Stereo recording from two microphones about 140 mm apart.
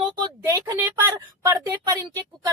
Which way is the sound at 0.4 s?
25° right (ahead or behind).